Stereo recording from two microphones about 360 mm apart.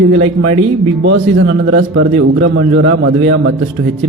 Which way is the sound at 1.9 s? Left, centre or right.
Right.